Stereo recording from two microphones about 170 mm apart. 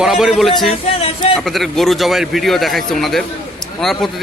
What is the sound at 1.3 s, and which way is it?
A man's voice, centre (ahead or behind).